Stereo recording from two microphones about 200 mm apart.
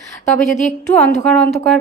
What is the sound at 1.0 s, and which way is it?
Speech, 5° left (ahead or behind).